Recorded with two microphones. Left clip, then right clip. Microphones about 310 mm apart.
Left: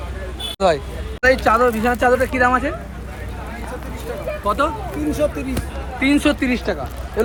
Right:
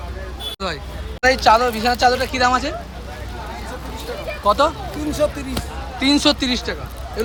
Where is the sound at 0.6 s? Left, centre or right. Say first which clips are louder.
Left 13 dB; centre.